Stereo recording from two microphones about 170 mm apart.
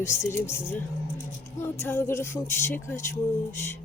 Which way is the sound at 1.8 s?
15° left (ahead or behind).